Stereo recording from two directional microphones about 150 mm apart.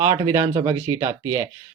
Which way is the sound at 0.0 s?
20° right (ahead or behind).